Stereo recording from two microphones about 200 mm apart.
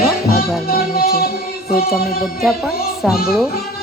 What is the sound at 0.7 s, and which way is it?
Music, 50° left (ahead or behind).